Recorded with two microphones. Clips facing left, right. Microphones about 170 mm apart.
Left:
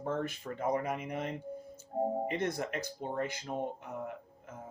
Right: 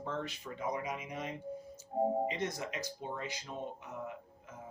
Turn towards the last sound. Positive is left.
turn(degrees=55)  # may be behind; listen again after turning